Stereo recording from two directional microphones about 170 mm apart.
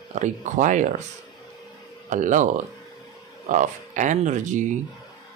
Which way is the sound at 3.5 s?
50° right (ahead or behind).